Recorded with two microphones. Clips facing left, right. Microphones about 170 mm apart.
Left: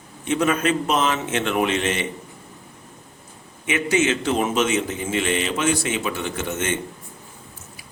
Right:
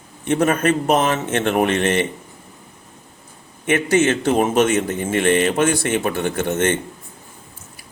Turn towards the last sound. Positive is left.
turn(degrees=-60)  # may be behind; listen again after turning